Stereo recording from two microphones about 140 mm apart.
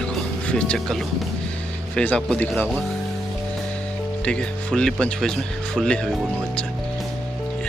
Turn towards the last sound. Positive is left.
turn(degrees=0)  # may be behind; listen again after turning